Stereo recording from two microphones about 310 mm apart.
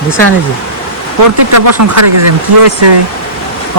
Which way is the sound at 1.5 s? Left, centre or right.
Right.